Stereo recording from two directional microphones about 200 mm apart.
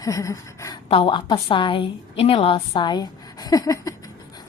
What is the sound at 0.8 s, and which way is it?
A woman's voice, 25° left (ahead or behind).